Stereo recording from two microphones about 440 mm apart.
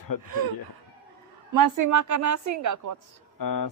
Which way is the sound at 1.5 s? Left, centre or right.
Right.